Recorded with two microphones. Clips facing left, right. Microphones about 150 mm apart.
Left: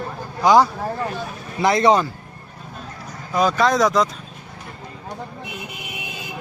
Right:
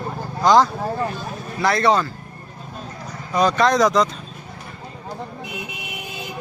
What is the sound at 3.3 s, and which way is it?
Speech, centre (ahead or behind).